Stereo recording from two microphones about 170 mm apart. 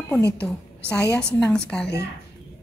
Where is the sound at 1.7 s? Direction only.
5° left (ahead or behind).